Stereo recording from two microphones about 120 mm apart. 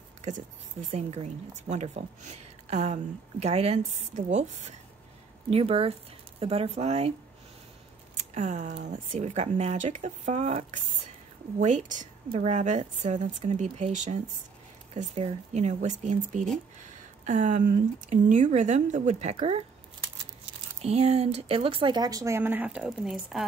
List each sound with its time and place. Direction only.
0.8 s speech: 70° right (ahead or behind)
5.5 s speech: 55° right (ahead or behind)
8.2 s speech: 80° right
11.6 s speech: 90° right
12.3 s speech: 70° right (ahead or behind)
13.9 s speech: 90° right
15.0 s speech: 70° right (ahead or behind)
19.3 s speech: 55° right (ahead or behind)
20.8 s speech: 60° right (ahead or behind)
21.9 s a woman's voice: 30° right (ahead or behind); by 23.4 s 5° right (ahead or behind)